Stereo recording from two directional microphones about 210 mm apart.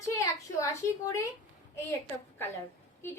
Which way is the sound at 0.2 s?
15° left (ahead or behind).